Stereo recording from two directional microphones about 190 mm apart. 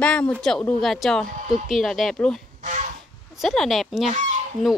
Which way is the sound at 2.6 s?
40° right (ahead or behind).